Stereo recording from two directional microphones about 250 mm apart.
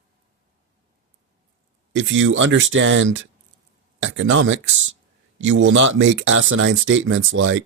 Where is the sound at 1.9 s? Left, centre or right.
Right.